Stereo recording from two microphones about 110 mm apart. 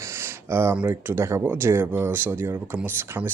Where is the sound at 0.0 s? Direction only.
20° right (ahead or behind).